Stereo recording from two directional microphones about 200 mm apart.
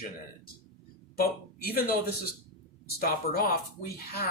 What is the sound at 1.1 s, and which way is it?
Speech, 50° left (ahead or behind).